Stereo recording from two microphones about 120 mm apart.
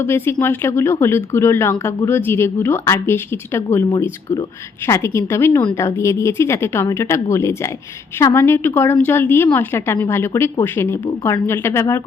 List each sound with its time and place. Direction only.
0.0 s a woman's voice: 20° left (ahead or behind)